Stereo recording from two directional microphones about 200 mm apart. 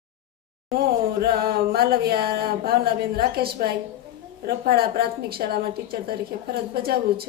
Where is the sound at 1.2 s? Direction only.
50° right (ahead or behind).